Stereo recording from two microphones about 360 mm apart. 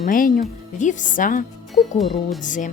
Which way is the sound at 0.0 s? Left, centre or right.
Left.